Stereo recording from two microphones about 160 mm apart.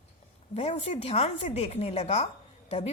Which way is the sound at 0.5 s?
45° left (ahead or behind).